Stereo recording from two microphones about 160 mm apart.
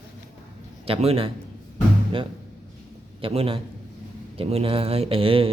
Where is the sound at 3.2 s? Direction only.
35° right (ahead or behind).